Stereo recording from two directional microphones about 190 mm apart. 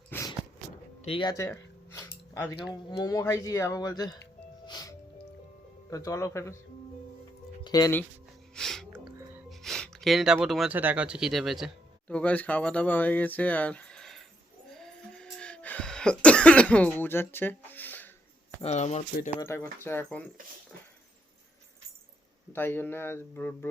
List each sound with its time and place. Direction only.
0.1 s a sound: 15° left (ahead or behind)
1.0 s speech: 25° left (ahead or behind)
4.6 s music: 20° left (ahead or behind)
5.9 s speech: 20° left (ahead or behind)
7.6 s music: 20° left (ahead or behind)
8.5 s a sound: centre (ahead or behind)
9.5 s speech: centre (ahead or behind)
14.7 s cough: 5° left (ahead or behind)
18.6 s speech: 35° left (ahead or behind)
19.4 s speech: 15° left (ahead or behind)
22.5 s speech: 10° left (ahead or behind)